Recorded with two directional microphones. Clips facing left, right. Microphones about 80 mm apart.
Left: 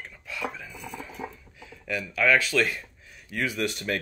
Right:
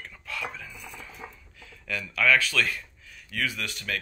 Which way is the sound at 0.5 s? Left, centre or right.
Centre.